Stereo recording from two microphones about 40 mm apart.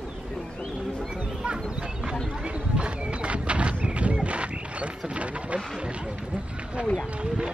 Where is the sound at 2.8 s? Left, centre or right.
Right.